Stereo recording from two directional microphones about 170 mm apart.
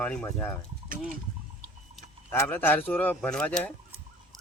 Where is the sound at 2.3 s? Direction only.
10° left (ahead or behind).